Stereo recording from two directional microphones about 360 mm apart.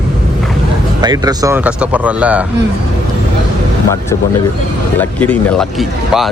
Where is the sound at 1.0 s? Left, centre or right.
Centre.